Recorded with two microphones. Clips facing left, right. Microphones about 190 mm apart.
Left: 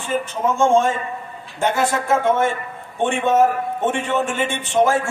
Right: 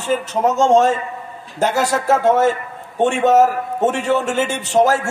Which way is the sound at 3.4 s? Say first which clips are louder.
Right 2 dB; 40° right (ahead or behind).